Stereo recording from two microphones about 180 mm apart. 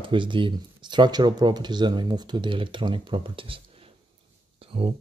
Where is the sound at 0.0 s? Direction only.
25° right (ahead or behind).